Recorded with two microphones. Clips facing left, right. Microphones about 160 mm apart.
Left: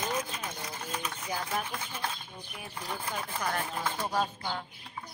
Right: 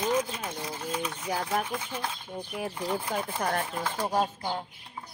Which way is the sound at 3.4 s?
40° right (ahead or behind).